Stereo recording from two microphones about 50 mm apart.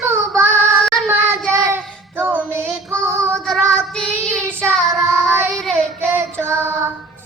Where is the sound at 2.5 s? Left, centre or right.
Right.